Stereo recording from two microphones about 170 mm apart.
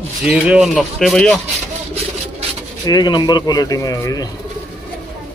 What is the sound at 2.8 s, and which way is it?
Speech, 25° left (ahead or behind).